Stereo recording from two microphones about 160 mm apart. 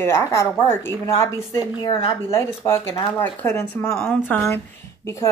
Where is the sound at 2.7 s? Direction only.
15° left (ahead or behind).